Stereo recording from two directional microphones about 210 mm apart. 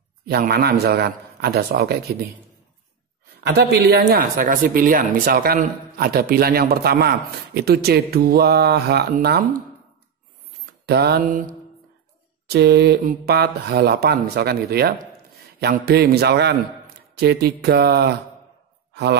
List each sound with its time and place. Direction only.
0.3 s speech: 45° right (ahead or behind)
3.4 s speech: 50° right (ahead or behind)
10.9 s speech: 50° right (ahead or behind)
12.4 s speech: 50° right (ahead or behind)